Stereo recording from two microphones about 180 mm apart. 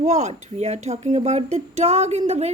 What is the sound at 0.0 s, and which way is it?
A woman's voice, 40° right (ahead or behind).